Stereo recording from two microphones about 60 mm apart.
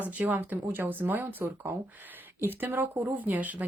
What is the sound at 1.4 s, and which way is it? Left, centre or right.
Speech, right.